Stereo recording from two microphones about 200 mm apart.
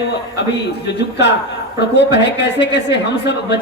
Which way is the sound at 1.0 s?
60° left (ahead or behind).